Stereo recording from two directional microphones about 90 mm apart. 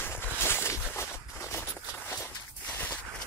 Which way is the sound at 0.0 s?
25° left (ahead or behind).